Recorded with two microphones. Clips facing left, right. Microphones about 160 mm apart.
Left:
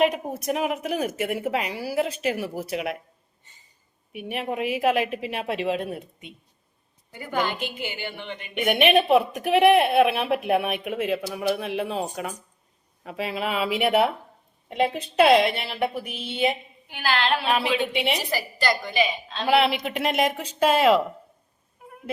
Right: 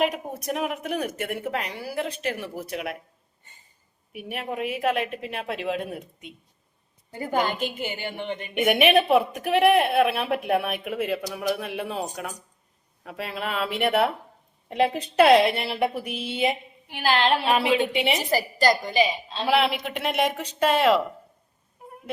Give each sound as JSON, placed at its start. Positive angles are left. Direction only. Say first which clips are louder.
{"t": 0.0, "sound": "speech", "louder": "left 3 dB", "side_deg": 0}
{"t": 4.1, "sound": "speech", "louder": "left 3 dB", "side_deg": 0}
{"t": 7.1, "sound": "a woman's voice", "louder": "right 2 dB", "side_deg": -40}
{"t": 8.6, "sound": "a woman's voice", "louder": "even", "side_deg": 0}
{"t": 17.1, "sound": "a woman's voice", "louder": "right 3 dB", "side_deg": -40}
{"t": 17.9, "sound": "speech", "louder": "right 1 dB", "side_deg": -5}
{"t": 18.3, "sound": "a woman's voice", "louder": "right 4 dB", "side_deg": -45}
{"t": 19.4, "sound": "speech", "louder": "left 2 dB", "side_deg": 0}